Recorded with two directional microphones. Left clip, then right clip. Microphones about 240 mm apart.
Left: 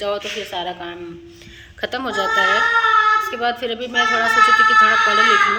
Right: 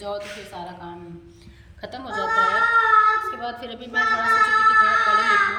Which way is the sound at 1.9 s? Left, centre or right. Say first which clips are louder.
Left 9 dB; centre.